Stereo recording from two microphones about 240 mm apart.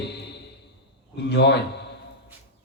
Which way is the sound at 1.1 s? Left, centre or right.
Left.